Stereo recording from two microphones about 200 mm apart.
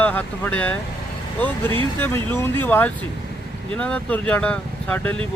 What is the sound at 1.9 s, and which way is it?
Speech, 10° left (ahead or behind).